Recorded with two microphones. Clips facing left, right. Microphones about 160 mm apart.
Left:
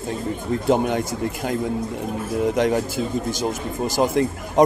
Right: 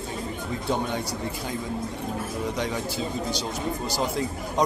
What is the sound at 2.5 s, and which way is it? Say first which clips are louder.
A man's voice: left 11 dB; 50° left (ahead or behind).